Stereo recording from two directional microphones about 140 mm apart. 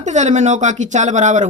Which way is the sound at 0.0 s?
60° right (ahead or behind).